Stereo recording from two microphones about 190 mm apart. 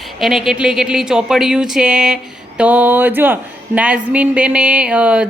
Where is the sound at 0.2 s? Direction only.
Centre (ahead or behind).